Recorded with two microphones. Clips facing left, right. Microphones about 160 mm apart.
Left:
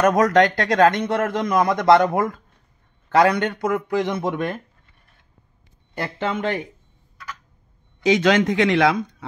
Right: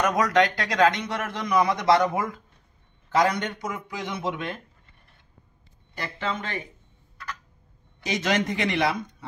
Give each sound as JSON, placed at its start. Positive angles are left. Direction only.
{"t": 0.0, "sound": "a man's voice", "side_deg": 45}
{"t": 3.1, "sound": "a man's voice", "side_deg": 65}
{"t": 8.0, "sound": "a man's voice", "side_deg": 90}